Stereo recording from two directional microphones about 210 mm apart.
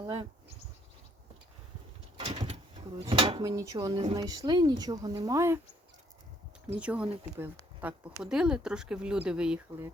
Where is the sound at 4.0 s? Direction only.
25° right (ahead or behind).